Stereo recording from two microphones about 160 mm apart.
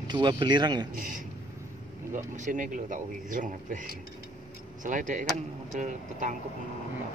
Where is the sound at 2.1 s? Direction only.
50° right (ahead or behind).